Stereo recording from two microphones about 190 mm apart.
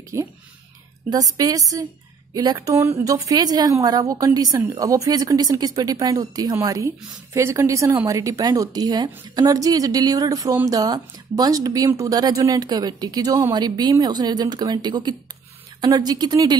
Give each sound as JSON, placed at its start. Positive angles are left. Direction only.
{"t": 0.1, "sound": "a woman's voice", "side_deg": -15}